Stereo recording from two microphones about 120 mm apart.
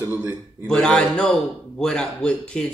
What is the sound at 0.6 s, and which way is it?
A man's voice, 5° left (ahead or behind).